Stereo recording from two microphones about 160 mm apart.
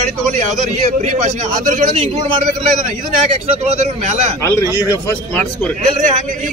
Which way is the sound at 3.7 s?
50° right (ahead or behind).